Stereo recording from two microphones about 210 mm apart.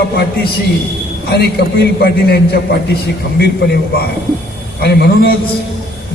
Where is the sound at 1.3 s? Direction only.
50° left (ahead or behind).